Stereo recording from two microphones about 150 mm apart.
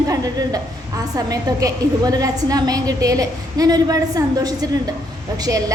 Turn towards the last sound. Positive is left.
turn(degrees=-25)  # may be behind; listen again after turning